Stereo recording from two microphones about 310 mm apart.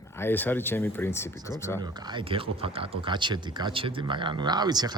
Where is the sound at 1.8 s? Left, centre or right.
Centre.